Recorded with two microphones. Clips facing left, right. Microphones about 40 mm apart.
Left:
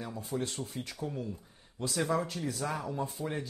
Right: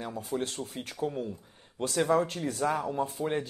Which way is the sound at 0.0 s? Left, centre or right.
Right.